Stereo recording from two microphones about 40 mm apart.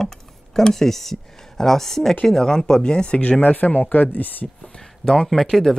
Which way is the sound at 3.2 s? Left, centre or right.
Left.